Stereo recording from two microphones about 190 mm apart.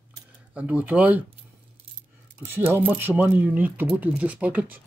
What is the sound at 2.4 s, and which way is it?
Speech, 10° right (ahead or behind).